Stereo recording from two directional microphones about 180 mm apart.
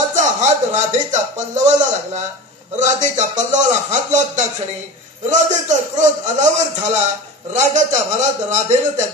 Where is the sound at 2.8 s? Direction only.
40° right (ahead or behind).